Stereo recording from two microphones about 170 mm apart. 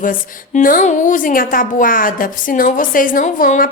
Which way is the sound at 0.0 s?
55° left (ahead or behind).